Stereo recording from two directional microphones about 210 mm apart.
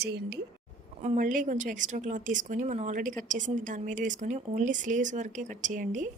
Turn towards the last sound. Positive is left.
turn(degrees=-40)  # may be behind; listen again after turning